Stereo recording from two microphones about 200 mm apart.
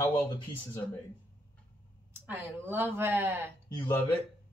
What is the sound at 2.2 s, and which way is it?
Speech, 10° right (ahead or behind).